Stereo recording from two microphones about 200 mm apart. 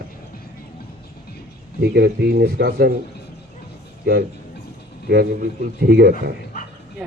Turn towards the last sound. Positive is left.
turn(degrees=-50)  # may be behind; listen again after turning